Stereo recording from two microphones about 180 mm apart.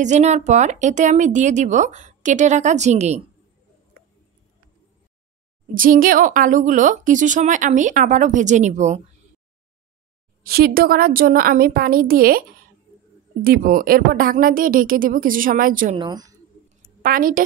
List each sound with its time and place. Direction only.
0.0 s speech: 40° right (ahead or behind)
5.8 s a woman's voice: 50° right (ahead or behind)
10.4 s a woman's voice: 55° right (ahead or behind)
16.0 s speech: 20° right (ahead or behind)
16.6 s a sound: 50° right (ahead or behind)